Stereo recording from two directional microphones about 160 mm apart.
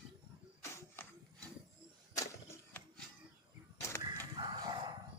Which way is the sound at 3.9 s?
15° left (ahead or behind).